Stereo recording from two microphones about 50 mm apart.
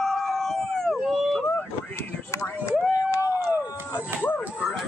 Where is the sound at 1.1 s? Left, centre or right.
Centre.